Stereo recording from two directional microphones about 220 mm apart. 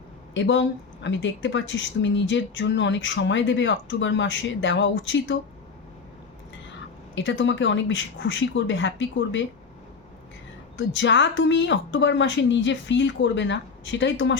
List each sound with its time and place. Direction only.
0.3 s speech: 55° left (ahead or behind)
7.2 s speech: 55° left (ahead or behind)
10.8 s speech: 55° left (ahead or behind)